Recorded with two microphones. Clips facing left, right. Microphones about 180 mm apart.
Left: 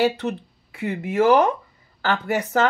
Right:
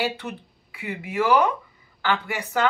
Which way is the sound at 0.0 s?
45° left (ahead or behind).